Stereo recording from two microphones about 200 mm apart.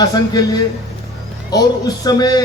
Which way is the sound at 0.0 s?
20° left (ahead or behind).